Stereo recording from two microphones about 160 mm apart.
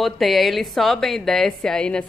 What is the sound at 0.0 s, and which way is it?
A woman's voice, centre (ahead or behind).